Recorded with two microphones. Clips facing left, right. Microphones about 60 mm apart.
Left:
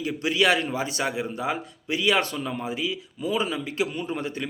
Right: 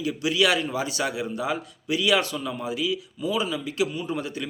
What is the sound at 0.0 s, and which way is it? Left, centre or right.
A man's voice, left.